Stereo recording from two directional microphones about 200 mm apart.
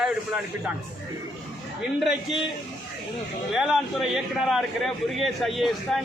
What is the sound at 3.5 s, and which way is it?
A man's voice, 5° right (ahead or behind).